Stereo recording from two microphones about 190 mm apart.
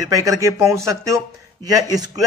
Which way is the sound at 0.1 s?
15° right (ahead or behind).